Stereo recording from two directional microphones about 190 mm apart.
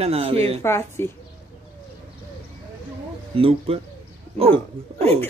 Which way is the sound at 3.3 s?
30° right (ahead or behind).